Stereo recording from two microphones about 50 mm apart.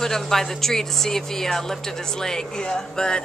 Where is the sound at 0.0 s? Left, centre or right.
Centre.